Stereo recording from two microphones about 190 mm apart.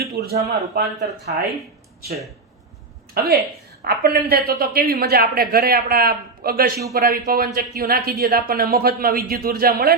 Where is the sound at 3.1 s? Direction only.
55° right (ahead or behind).